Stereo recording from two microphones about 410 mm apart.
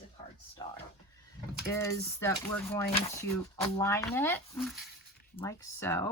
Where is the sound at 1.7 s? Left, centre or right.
Left.